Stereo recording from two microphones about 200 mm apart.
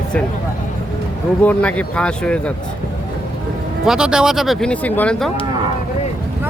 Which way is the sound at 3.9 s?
5° right (ahead or behind).